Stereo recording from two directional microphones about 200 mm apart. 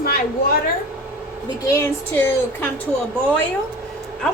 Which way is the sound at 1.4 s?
15° left (ahead or behind).